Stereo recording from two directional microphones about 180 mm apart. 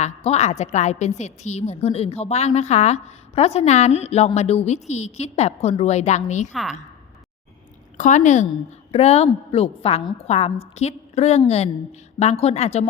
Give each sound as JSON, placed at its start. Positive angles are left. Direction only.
{"t": 0.3, "sound": "a woman's voice", "side_deg": 40}
{"t": 6.5, "sound": "a woman's voice", "side_deg": 0}
{"t": 7.9, "sound": "a woman's voice", "side_deg": 45}